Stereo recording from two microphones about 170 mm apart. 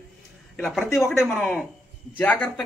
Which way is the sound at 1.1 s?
Centre (ahead or behind).